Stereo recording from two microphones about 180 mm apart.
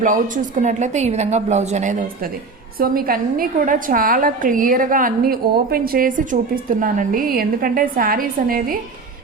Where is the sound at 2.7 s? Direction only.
55° right (ahead or behind).